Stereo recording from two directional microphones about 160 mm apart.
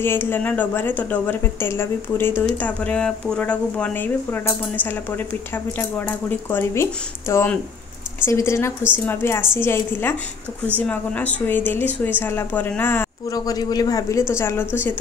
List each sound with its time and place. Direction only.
0.0 s speech: 15° left (ahead or behind)
5.8 s speech: 10° left (ahead or behind)